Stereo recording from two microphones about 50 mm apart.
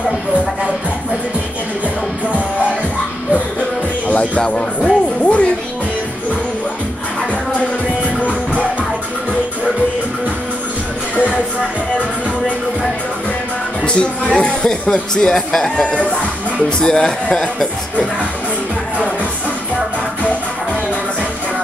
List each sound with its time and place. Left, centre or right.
4.4 s speech: left
4.8 s music: left
8.2 s music: left
13.8 s speech: centre